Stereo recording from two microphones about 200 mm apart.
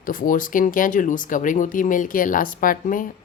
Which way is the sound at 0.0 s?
45° left (ahead or behind).